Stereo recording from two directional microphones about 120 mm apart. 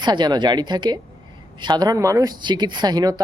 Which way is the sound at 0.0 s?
35° right (ahead or behind).